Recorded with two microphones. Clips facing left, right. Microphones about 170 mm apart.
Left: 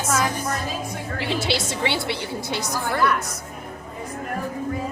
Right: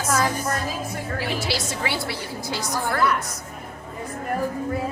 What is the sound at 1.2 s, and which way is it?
A woman's voice, 25° left (ahead or behind).